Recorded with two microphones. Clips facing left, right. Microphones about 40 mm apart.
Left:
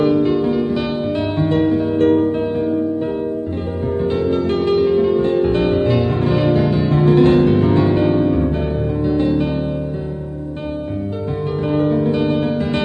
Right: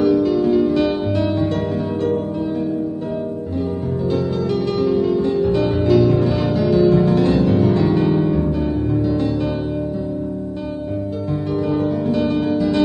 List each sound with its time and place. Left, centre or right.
0.0 s music: left
0.5 s music: centre
1.3 s music: left
2.0 s music: left
4.1 s music: left
11.6 s music: left